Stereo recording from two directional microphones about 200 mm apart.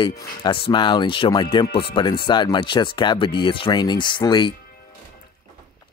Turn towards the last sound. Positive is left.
turn(degrees=25)  # may be behind; listen again after turning